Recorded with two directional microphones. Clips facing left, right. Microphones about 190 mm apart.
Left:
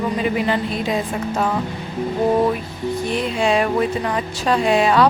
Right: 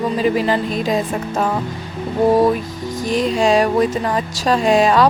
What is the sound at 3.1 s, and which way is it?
Speech, 40° right (ahead or behind).